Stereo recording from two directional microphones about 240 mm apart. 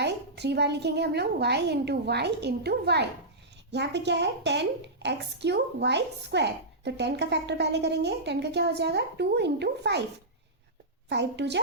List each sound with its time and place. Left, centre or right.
0.0 s a woman's voice: right
11.1 s a woman's voice: right